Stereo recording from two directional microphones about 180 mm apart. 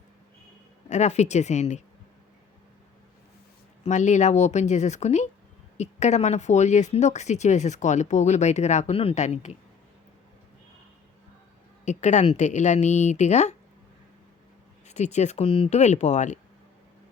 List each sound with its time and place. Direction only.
0.9 s speech: 40° left (ahead or behind)
3.8 s speech: 40° left (ahead or behind)
11.9 s speech: 40° left (ahead or behind)
14.8 s speech: 40° left (ahead or behind)